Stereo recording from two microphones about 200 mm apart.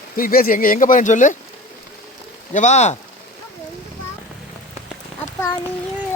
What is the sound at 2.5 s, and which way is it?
Speech, 35° left (ahead or behind).